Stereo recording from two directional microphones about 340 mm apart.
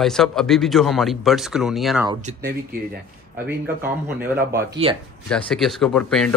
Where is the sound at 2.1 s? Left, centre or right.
Centre.